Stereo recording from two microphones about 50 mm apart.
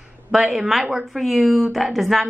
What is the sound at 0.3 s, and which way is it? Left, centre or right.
Speech, centre.